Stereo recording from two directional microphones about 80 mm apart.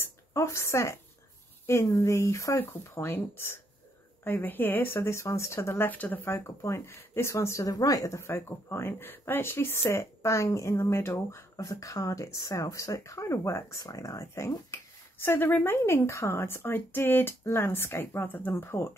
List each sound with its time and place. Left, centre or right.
0.0 s a woman's voice: left
2.6 s speech: left